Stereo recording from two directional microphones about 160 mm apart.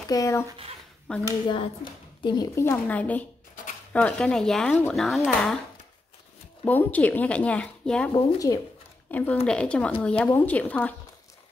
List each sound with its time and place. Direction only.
0.1 s speech: 20° left (ahead or behind)
1.1 s speech: 10° left (ahead or behind)
2.2 s speech: 25° left (ahead or behind); by 5.6 s centre (ahead or behind)
6.6 s speech: 10° left (ahead or behind)
8.1 s speech: 35° left (ahead or behind)
9.1 s speech: 10° left (ahead or behind)